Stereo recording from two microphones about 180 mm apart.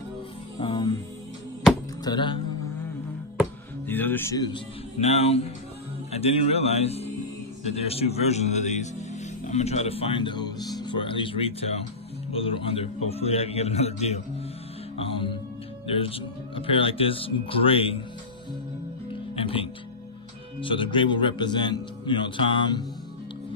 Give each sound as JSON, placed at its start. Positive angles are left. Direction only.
{"t": 0.6, "sound": "music", "side_deg": 25}
{"t": 2.0, "sound": "a man's voice", "side_deg": 25}
{"t": 3.8, "sound": "speech", "side_deg": 10}
{"t": 5.0, "sound": "a man's voice", "side_deg": 35}
{"t": 19.3, "sound": "music", "side_deg": 30}
{"t": 20.6, "sound": "a man's voice", "side_deg": 30}